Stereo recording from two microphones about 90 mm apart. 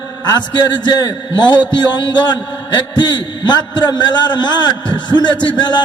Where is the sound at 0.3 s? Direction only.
55° left (ahead or behind).